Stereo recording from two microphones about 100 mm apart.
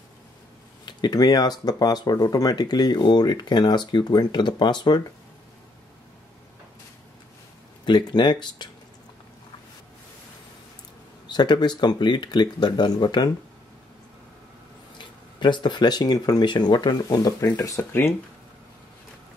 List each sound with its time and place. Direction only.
0.8 s speech: 45° left (ahead or behind)
7.8 s speech: 50° left (ahead or behind)
11.2 s speech: 50° left (ahead or behind)
15.0 s speech: 50° left (ahead or behind); by 17.8 s 35° left (ahead or behind)